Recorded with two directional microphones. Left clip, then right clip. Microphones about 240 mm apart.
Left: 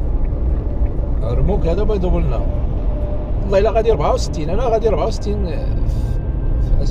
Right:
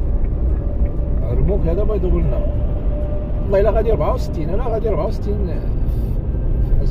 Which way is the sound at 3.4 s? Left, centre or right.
Left.